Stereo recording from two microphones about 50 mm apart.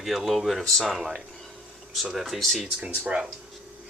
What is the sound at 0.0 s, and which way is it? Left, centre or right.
Speech, centre.